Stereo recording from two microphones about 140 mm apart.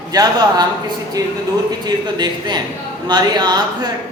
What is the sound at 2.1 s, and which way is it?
A man's voice, 30° right (ahead or behind).